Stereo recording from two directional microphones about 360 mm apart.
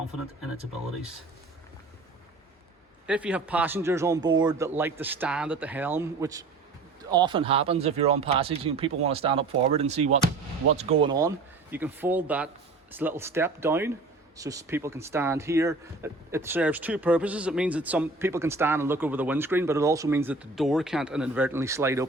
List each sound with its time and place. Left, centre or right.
3.1 s speech: centre